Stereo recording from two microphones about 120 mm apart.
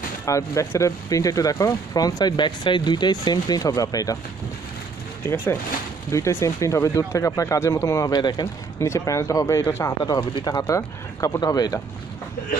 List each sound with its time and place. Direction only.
0.2 s speech: 25° left (ahead or behind)
5.2 s speech: 15° left (ahead or behind); by 8.5 s 35° left (ahead or behind)
8.7 s speech: 25° left (ahead or behind)
10.3 s speech: 40° left (ahead or behind)
10.6 s speech: 25° left (ahead or behind)